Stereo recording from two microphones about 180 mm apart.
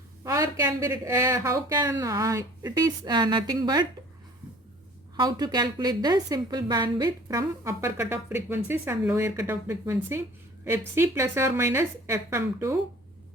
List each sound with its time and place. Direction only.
0.3 s speech: 20° right (ahead or behind)
5.1 s a woman's voice: 25° right (ahead or behind)